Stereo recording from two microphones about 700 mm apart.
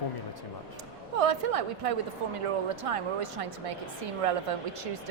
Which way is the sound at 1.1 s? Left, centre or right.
Right.